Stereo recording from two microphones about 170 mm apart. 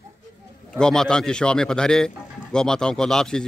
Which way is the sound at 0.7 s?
5° left (ahead or behind).